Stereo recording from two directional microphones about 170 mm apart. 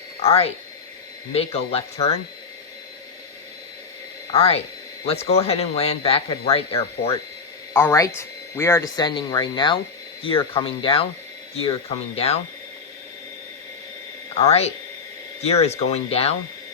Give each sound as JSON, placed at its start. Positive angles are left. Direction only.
{"t": 0.2, "sound": "speech", "side_deg": 35}
{"t": 4.4, "sound": "speech", "side_deg": 35}
{"t": 7.7, "sound": "speech", "side_deg": 15}
{"t": 12.1, "sound": "speech", "side_deg": 35}
{"t": 14.3, "sound": "speech", "side_deg": 40}